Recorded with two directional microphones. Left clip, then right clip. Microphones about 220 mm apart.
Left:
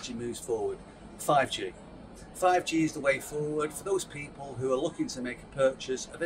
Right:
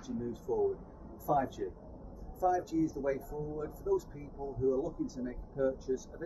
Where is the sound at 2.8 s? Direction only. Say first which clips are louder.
Left 6 dB; 30° left (ahead or behind).